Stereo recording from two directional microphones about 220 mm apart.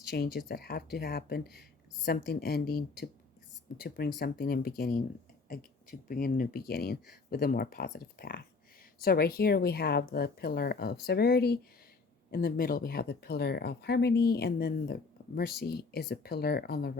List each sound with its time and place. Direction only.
0.1 s speech: 45° left (ahead or behind)